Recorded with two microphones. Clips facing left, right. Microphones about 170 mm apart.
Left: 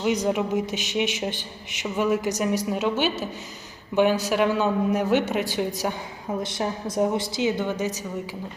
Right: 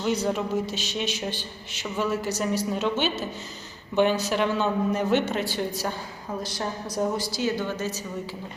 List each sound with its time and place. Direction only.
0.0 s a man's voice: 15° left (ahead or behind)
6.9 s a woman's voice: 25° left (ahead or behind)